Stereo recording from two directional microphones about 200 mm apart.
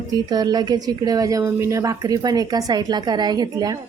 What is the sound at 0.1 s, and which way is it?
A woman's voice, 20° right (ahead or behind).